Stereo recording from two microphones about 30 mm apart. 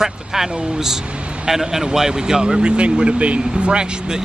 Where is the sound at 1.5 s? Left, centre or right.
Centre; by 3.4 s right.